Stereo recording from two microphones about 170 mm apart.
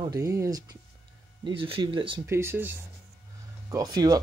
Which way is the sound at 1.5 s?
30° right (ahead or behind).